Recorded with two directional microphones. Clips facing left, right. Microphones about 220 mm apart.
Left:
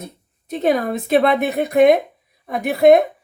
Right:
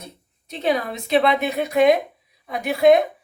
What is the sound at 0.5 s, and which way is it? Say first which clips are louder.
A woman's voice: left 5 dB; 45° left (ahead or behind).